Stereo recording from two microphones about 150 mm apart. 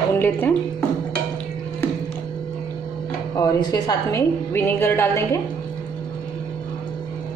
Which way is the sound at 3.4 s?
25° left (ahead or behind).